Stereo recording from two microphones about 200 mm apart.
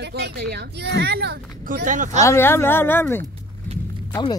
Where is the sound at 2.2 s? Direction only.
15° left (ahead or behind).